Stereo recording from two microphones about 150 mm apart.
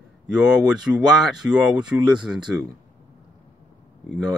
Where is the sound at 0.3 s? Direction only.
5° right (ahead or behind).